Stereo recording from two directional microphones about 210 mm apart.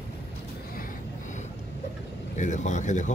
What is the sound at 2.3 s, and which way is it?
Speech, 35° left (ahead or behind).